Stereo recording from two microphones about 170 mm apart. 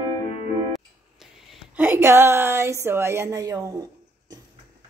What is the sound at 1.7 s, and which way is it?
Speech, 10° right (ahead or behind).